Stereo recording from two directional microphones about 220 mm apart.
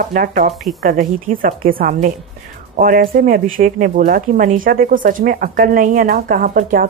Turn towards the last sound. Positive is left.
turn(degrees=-40)  # may be behind; listen again after turning